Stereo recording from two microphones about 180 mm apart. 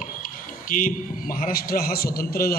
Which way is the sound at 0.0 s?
50° left (ahead or behind).